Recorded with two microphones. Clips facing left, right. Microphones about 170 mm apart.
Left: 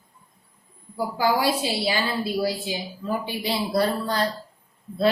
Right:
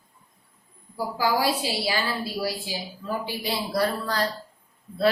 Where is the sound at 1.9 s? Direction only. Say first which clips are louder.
Left 3 dB; 25° left (ahead or behind).